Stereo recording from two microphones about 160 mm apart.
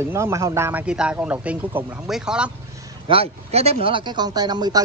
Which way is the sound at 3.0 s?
35° right (ahead or behind).